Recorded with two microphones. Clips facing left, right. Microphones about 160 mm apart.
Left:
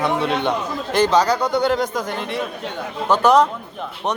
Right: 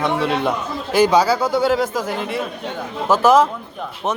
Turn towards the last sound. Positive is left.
turn(degrees=0)  # may be behind; listen again after turning